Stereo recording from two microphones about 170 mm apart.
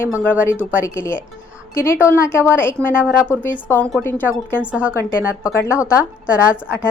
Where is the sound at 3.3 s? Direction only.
15° left (ahead or behind).